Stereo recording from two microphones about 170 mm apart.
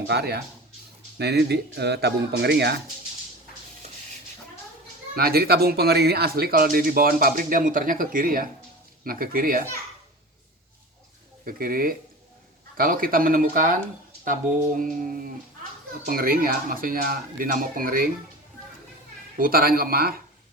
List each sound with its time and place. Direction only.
0.1 s speech: 70° right (ahead or behind)
5.1 s speech: 65° right (ahead or behind)
11.4 s speech: 55° right (ahead or behind)
19.4 s speech: 60° right (ahead or behind)